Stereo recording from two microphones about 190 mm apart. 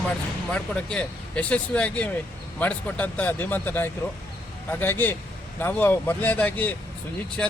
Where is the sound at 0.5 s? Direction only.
5° left (ahead or behind).